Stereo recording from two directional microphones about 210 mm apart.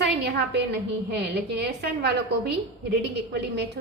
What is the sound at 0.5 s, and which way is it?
A woman's voice, 50° right (ahead or behind).